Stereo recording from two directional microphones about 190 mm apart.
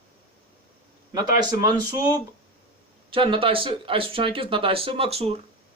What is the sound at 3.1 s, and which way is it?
Speech, 25° right (ahead or behind).